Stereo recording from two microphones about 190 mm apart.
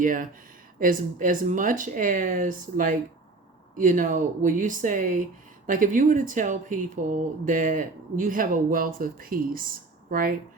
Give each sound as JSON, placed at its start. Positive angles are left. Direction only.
{"t": 0.0, "sound": "speech", "side_deg": -45}